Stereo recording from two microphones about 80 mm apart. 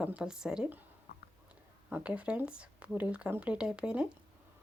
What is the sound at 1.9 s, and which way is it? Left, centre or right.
A woman's voice, centre.